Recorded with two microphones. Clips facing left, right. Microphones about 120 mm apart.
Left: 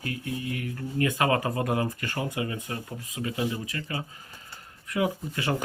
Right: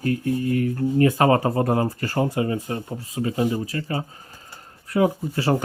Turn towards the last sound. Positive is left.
turn(degrees=-35)  # may be behind; listen again after turning